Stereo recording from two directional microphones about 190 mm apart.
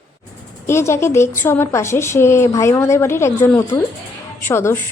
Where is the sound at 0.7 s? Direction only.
15° left (ahead or behind).